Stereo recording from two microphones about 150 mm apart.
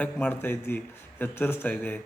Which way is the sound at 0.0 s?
10° left (ahead or behind).